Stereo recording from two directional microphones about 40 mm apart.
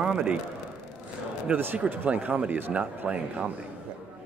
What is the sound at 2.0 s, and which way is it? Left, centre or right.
Speech, right.